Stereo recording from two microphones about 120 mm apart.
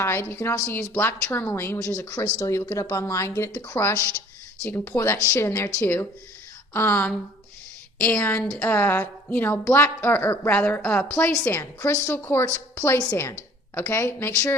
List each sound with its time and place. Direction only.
0.0 s a woman's voice: 20° left (ahead or behind)